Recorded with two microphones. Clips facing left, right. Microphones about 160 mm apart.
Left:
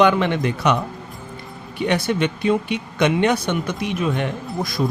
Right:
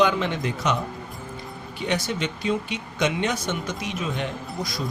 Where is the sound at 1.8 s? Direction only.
60° left (ahead or behind).